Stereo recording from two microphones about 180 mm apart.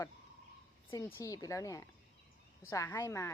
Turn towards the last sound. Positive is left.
turn(degrees=15)  # may be behind; listen again after turning